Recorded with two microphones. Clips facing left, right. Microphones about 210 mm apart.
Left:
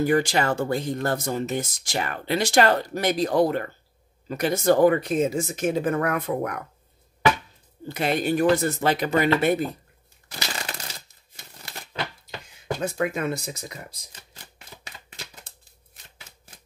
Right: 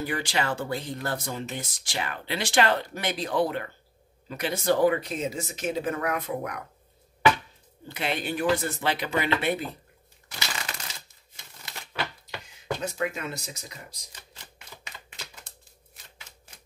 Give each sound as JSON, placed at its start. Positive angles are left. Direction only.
{"t": 0.0, "sound": "speech", "side_deg": 45}
{"t": 7.9, "sound": "speech", "side_deg": 45}
{"t": 10.2, "sound": "a sound", "side_deg": 35}
{"t": 12.8, "sound": "speech", "side_deg": 55}